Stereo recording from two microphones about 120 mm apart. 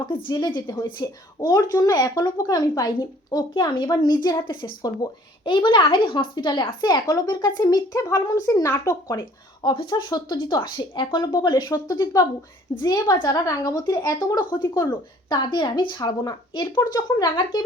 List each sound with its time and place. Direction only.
0.0 s a woman's voice: 45° left (ahead or behind); by 9.2 s 25° left (ahead or behind)
9.6 s speech: 40° left (ahead or behind)